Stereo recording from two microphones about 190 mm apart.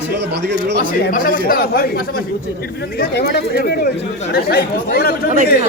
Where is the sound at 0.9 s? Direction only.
50° left (ahead or behind).